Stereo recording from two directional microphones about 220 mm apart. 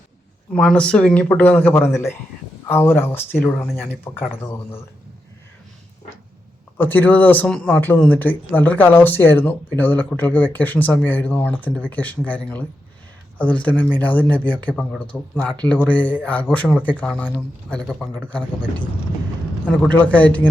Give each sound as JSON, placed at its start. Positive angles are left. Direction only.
{"t": 0.5, "sound": "speech", "side_deg": 5}
{"t": 6.7, "sound": "speech", "side_deg": 10}
{"t": 19.6, "sound": "speech", "side_deg": 5}